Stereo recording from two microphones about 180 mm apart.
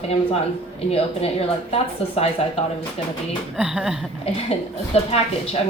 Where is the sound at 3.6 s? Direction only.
5° right (ahead or behind).